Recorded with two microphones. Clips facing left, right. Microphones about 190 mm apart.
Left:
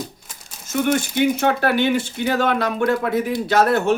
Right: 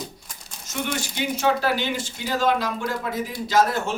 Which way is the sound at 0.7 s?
55° left (ahead or behind).